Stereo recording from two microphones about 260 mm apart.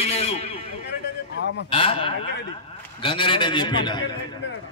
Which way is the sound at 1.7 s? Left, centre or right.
Left.